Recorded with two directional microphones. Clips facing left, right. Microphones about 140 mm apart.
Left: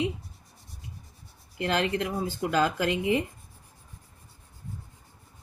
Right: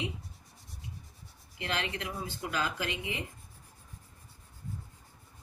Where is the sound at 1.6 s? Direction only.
40° left (ahead or behind).